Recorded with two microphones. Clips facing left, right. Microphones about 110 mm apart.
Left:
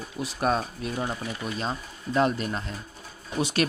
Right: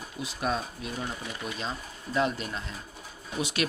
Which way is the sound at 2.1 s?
45° left (ahead or behind).